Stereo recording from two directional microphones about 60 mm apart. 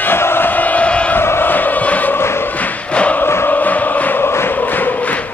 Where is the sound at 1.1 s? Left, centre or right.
Left.